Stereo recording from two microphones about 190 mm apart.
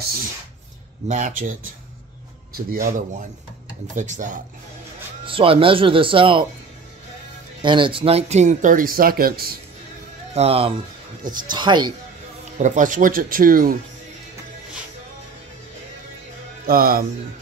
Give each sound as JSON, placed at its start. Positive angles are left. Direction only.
{"t": 1.0, "sound": "speech", "side_deg": -40}
{"t": 2.5, "sound": "speech", "side_deg": -50}
{"t": 3.9, "sound": "speech", "side_deg": -40}
{"t": 5.2, "sound": "speech", "side_deg": -30}
{"t": 7.6, "sound": "speech", "side_deg": -25}
{"t": 10.3, "sound": "speech", "side_deg": -30}
{"t": 11.2, "sound": "speech", "side_deg": -45}
{"t": 11.5, "sound": "speech", "side_deg": -25}
{"t": 12.5, "sound": "speech", "side_deg": -40}
{"t": 16.6, "sound": "speech", "side_deg": -50}